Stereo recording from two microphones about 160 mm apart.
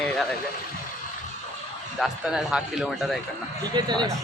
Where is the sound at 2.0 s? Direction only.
Centre (ahead or behind).